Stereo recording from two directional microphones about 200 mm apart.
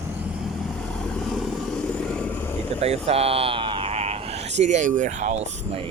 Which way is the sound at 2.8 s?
30° right (ahead or behind).